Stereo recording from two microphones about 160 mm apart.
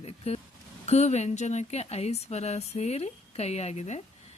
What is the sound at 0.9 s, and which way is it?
Speech, 45° left (ahead or behind).